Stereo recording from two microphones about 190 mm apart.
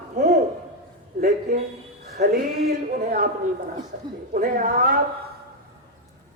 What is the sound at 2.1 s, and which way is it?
A woman's voice, 50° right (ahead or behind).